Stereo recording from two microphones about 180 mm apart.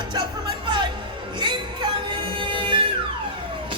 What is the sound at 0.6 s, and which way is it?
Music, 25° right (ahead or behind).